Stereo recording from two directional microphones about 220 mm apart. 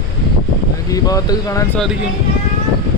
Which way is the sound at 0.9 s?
15° left (ahead or behind).